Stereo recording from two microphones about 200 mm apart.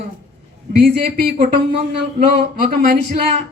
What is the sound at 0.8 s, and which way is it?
Speech, 45° right (ahead or behind).